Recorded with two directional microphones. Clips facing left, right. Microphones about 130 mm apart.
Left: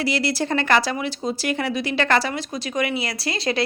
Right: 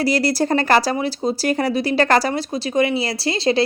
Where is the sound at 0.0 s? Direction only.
40° right (ahead or behind).